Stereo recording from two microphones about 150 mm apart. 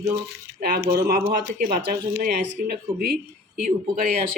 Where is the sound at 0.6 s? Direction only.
90° right.